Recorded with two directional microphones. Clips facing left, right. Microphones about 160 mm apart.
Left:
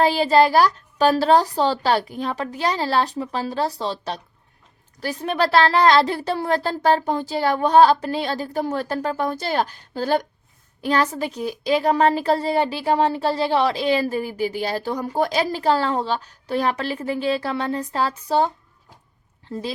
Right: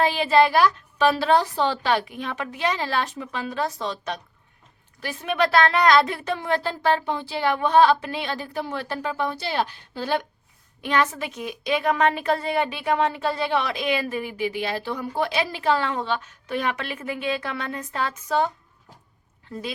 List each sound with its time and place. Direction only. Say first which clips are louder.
0.0 s speech: left 3 dB; 40° left (ahead or behind)